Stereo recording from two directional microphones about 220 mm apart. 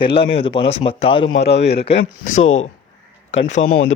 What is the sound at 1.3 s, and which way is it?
Speech, 50° left (ahead or behind).